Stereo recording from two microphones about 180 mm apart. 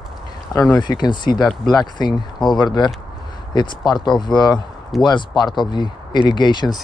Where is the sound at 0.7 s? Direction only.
25° left (ahead or behind).